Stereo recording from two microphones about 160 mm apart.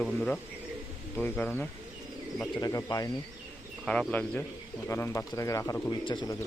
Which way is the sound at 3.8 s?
5° left (ahead or behind).